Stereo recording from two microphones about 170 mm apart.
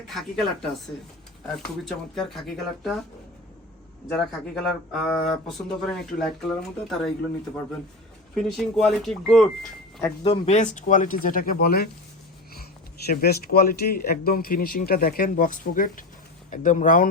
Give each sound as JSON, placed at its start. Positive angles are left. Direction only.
{"t": 0.1, "sound": "speech", "side_deg": 0}
{"t": 1.9, "sound": "speech", "side_deg": 0}
{"t": 4.1, "sound": "speech", "side_deg": 5}
{"t": 8.4, "sound": "speech", "side_deg": 0}
{"t": 10.2, "sound": "speech", "side_deg": 40}
{"t": 13.1, "sound": "speech", "side_deg": 65}